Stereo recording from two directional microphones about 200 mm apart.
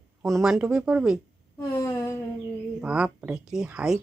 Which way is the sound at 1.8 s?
20° left (ahead or behind).